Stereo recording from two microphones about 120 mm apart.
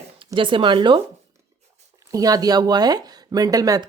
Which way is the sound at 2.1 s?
30° right (ahead or behind).